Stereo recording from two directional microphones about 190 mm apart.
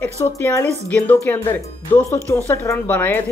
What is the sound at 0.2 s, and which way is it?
Speech, 15° left (ahead or behind).